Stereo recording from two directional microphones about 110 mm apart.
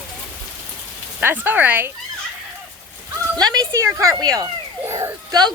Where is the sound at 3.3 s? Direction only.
35° right (ahead or behind).